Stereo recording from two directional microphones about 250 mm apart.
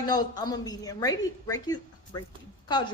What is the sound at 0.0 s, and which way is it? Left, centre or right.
A man's voice, centre.